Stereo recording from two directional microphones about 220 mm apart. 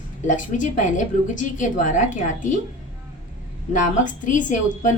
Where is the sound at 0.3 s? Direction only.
35° left (ahead or behind).